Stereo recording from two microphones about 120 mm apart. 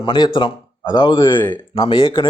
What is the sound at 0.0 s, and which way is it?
A man's voice, 40° left (ahead or behind).